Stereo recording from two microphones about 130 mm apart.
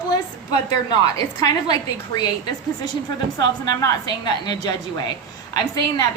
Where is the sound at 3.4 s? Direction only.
35° left (ahead or behind).